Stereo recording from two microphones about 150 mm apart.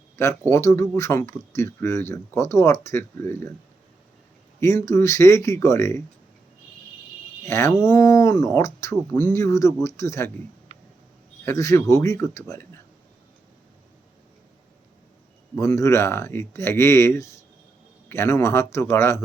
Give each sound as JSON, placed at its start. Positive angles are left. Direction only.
{"t": 0.2, "sound": "speech", "side_deg": 20}
{"t": 4.6, "sound": "speech", "side_deg": 20}
{"t": 7.4, "sound": "speech", "side_deg": 15}
{"t": 11.4, "sound": "speech", "side_deg": 20}
{"t": 15.5, "sound": "speech", "side_deg": 20}